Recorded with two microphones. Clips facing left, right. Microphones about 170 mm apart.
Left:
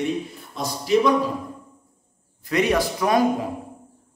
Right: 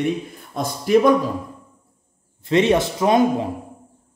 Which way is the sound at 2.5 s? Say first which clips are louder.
Right 4 dB; 25° right (ahead or behind).